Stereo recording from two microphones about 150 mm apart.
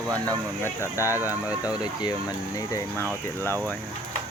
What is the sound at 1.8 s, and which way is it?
Speech, 30° left (ahead or behind).